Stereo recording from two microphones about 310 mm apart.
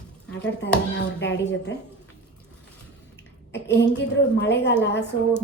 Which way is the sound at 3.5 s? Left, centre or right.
Left.